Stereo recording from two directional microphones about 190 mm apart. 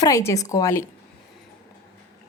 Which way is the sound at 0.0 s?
15° left (ahead or behind).